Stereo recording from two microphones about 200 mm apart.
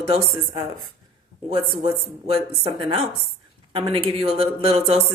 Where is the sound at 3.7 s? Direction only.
25° right (ahead or behind).